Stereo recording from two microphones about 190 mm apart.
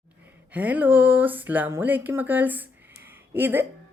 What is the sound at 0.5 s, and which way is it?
Speech, 10° right (ahead or behind).